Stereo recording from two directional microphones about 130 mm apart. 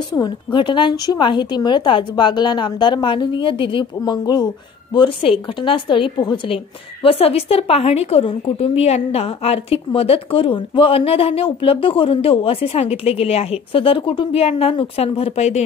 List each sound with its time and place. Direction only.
0.1 s a woman's voice: 35° left (ahead or behind); by 15.6 s 55° left (ahead or behind)